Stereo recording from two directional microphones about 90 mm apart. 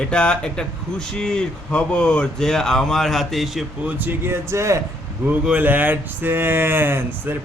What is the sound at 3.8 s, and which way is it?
Speech, 20° right (ahead or behind).